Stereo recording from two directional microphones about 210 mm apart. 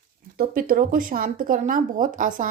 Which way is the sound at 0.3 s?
45° right (ahead or behind).